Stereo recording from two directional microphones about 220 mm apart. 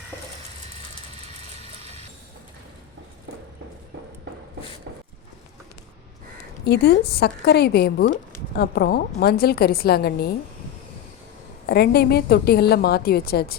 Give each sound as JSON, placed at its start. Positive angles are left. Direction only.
{"t": 1.6, "sound": "mechanisms", "side_deg": -30}
{"t": 6.7, "sound": "a woman's voice", "side_deg": 45}
{"t": 11.6, "sound": "a woman's voice", "side_deg": 45}